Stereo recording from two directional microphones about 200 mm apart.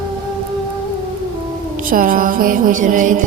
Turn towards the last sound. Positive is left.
turn(degrees=-40)  # may be behind; listen again after turning